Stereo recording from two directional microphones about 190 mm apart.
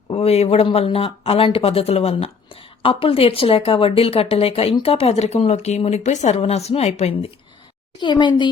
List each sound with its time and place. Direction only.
0.1 s speech: 30° left (ahead or behind)
7.9 s a woman's voice: 25° left (ahead or behind)